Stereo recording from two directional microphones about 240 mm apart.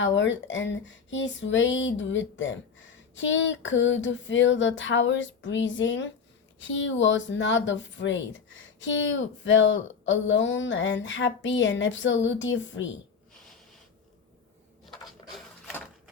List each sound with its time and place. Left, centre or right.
0.0 s speech: left